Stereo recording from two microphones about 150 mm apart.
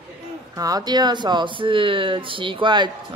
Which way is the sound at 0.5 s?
25° right (ahead or behind).